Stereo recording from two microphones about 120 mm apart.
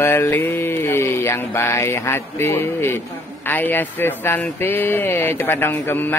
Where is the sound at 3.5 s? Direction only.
15° left (ahead or behind).